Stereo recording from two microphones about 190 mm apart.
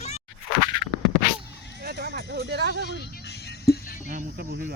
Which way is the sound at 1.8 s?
55° right (ahead or behind).